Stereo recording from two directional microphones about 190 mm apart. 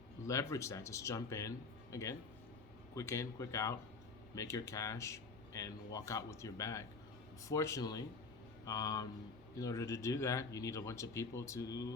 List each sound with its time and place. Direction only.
0.3 s speech: 15° left (ahead or behind)